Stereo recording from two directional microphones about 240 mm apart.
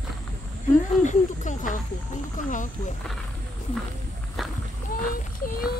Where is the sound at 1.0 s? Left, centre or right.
Left.